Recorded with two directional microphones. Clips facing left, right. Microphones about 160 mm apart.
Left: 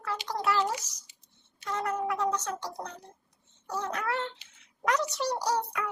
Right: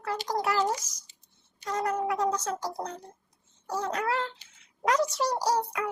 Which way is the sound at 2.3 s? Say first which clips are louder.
Right 2 dB; 35° right (ahead or behind).